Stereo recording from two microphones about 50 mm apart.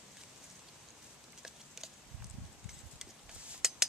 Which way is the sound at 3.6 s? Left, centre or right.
Centre.